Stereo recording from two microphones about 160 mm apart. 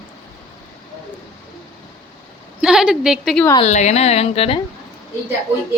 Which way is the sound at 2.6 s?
5° right (ahead or behind).